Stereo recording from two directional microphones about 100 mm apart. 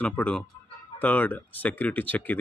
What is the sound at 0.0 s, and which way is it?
Speech, 15° left (ahead or behind).